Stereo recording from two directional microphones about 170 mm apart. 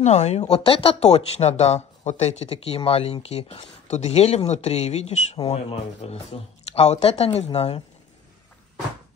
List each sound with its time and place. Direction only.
0.0 s speech: 40° left (ahead or behind)